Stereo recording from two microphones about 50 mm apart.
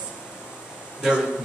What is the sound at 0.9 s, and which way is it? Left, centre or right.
Speech, centre.